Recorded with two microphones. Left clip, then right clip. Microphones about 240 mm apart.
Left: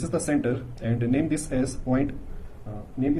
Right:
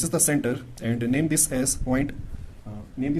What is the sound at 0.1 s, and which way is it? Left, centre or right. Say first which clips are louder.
Speech: even; right.